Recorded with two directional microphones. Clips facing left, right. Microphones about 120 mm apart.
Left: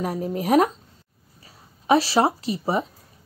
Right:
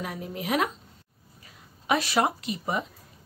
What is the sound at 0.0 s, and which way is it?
A woman's voice, 40° left (ahead or behind).